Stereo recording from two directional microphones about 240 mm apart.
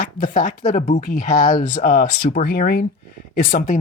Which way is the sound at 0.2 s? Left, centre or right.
Left.